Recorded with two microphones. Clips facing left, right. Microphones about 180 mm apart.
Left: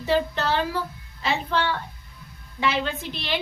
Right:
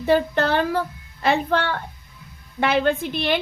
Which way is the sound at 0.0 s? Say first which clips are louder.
Right 4 dB; 55° right (ahead or behind).